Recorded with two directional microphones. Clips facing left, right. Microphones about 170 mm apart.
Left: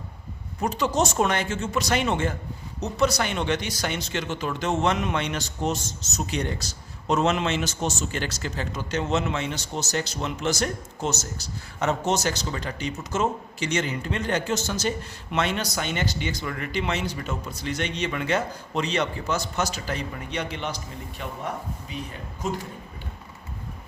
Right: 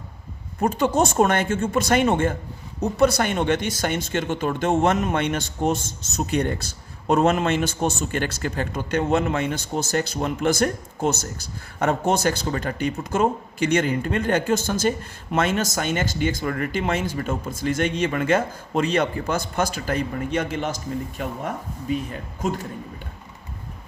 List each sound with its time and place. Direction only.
0.6 s speech: 50° right (ahead or behind)